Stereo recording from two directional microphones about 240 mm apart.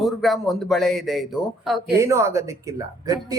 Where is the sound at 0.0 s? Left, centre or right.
Centre.